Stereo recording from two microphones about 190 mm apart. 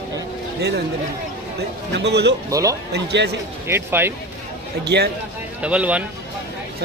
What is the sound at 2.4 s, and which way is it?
Speech, 15° right (ahead or behind).